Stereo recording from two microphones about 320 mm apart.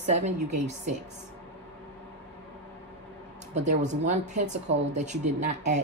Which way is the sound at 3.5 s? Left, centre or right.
Right.